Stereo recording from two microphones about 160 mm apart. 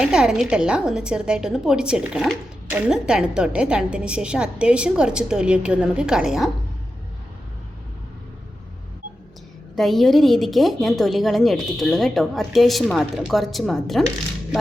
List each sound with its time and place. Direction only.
0.0 s a woman's voice: 5° right (ahead or behind)
9.7 s a woman's voice: centre (ahead or behind)